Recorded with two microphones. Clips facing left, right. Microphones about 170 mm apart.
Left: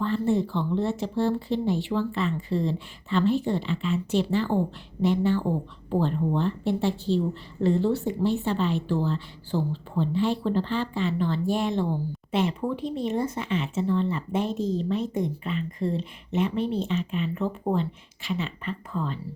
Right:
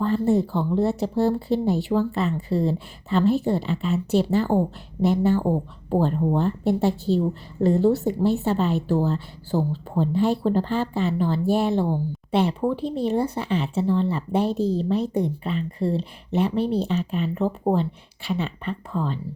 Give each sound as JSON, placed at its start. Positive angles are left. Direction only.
{"t": 0.0, "sound": "speech", "side_deg": -40}